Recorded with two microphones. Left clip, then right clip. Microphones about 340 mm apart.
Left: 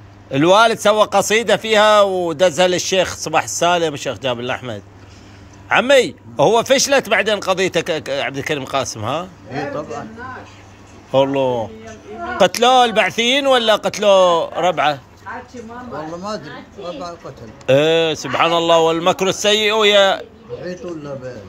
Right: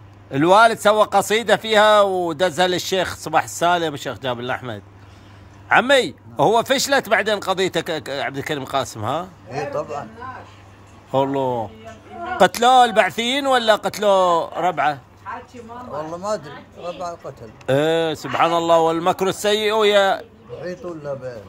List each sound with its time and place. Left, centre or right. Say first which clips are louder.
0.3 s a man's voice: left 1 dB; centre
11.1 s a man's voice: left 4 dB; centre